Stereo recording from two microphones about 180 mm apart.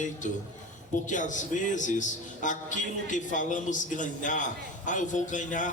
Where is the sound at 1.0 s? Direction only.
45° left (ahead or behind).